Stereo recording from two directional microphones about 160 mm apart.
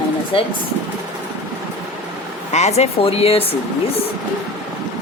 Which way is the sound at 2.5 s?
45° left (ahead or behind).